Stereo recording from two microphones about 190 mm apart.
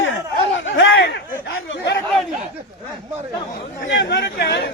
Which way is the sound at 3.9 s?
70° left (ahead or behind).